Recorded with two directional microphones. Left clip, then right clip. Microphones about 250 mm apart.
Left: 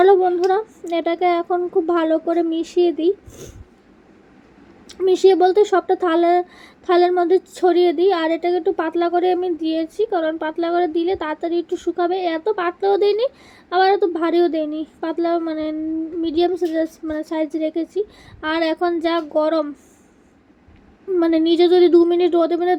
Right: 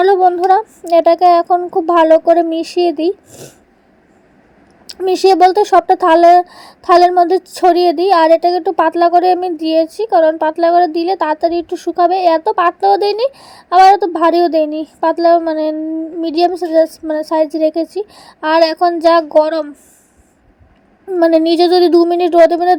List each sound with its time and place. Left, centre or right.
0.0 s speech: right
4.9 s speech: right
21.2 s speech: right